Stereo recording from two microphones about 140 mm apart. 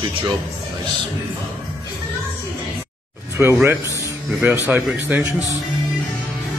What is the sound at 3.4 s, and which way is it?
Speech, 10° right (ahead or behind).